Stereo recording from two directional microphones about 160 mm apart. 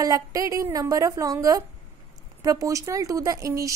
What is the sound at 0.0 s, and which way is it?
A woman's voice, 20° right (ahead or behind).